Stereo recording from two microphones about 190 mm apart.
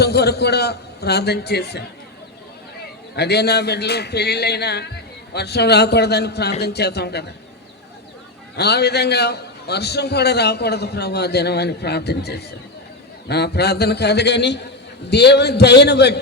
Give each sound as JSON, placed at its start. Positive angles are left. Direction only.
{"t": 0.0, "sound": "a man's voice", "side_deg": 60}
{"t": 3.2, "sound": "a man's voice", "side_deg": 60}
{"t": 8.5, "sound": "a man's voice", "side_deg": 60}